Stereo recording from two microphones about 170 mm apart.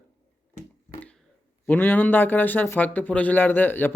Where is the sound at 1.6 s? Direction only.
10° left (ahead or behind).